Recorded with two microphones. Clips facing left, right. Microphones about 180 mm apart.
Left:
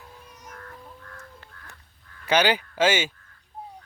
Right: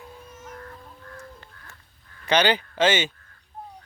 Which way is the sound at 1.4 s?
5° left (ahead or behind).